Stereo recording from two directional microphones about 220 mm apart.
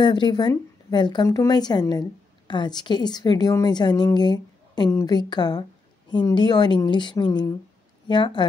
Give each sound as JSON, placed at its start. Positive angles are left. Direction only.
{"t": 0.0, "sound": "speech", "side_deg": 20}